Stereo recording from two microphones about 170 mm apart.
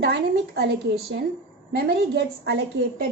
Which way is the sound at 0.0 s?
75° right (ahead or behind).